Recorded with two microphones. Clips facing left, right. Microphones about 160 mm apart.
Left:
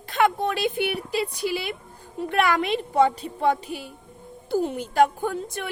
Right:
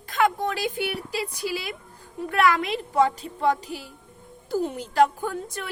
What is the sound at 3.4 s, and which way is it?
A woman's voice, 20° left (ahead or behind).